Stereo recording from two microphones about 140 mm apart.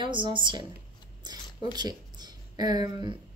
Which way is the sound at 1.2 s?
30° right (ahead or behind).